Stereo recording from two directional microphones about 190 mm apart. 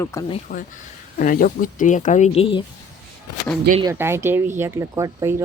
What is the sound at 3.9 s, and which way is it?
Speech, 15° right (ahead or behind).